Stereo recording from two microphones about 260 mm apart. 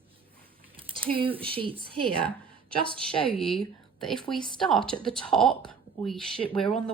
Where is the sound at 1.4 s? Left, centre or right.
Centre.